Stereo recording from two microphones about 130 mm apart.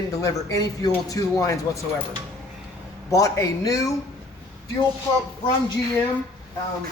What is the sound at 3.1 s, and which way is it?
Speech, 25° left (ahead or behind).